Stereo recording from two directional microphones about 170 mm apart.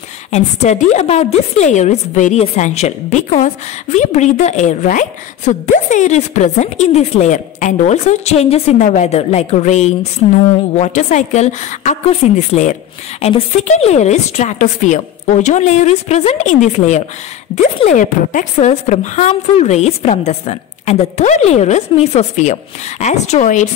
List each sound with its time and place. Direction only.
0.3 s a woman's voice: 40° left (ahead or behind)